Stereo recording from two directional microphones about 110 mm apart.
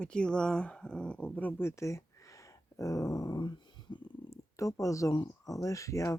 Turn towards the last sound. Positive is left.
turn(degrees=30)  # may be behind; listen again after turning